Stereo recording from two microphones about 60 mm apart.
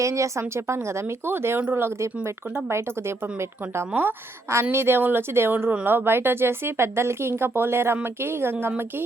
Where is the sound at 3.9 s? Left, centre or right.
Right.